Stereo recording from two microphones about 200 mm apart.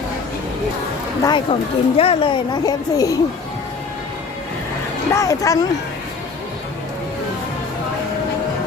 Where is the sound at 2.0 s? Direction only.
25° left (ahead or behind).